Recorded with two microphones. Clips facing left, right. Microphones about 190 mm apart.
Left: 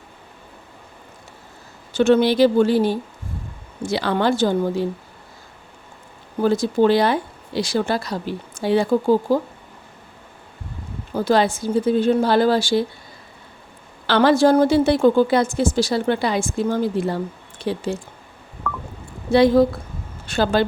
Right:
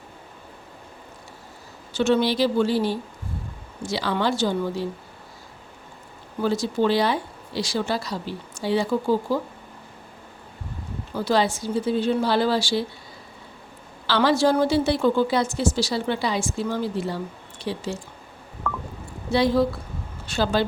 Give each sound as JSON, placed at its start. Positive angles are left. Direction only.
{"t": 2.0, "sound": "a woman's voice", "side_deg": 55}
{"t": 6.4, "sound": "a woman's voice", "side_deg": 50}
{"t": 11.1, "sound": "a woman's voice", "side_deg": 55}
{"t": 14.1, "sound": "a woman's voice", "side_deg": 55}
{"t": 19.3, "sound": "a woman's voice", "side_deg": 50}